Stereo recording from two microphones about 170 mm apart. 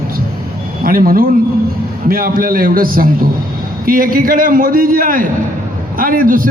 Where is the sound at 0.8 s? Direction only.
55° right (ahead or behind).